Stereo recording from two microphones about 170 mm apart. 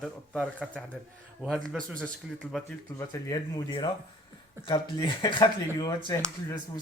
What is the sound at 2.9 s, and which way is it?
Speech, 20° left (ahead or behind).